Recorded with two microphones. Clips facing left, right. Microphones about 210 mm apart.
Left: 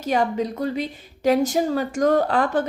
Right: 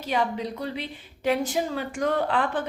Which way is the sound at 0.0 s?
45° left (ahead or behind).